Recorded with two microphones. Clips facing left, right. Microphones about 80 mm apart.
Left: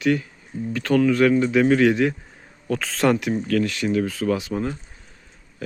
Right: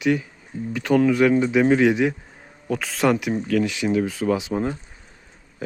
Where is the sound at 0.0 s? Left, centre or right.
Centre.